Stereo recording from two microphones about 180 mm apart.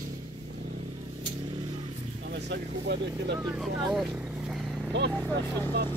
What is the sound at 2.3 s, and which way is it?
Speech, 70° right (ahead or behind).